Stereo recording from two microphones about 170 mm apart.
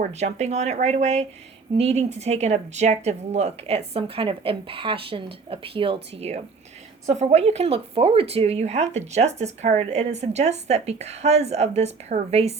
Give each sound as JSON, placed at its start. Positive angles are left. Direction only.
{"t": 0.0, "sound": "speech", "side_deg": -40}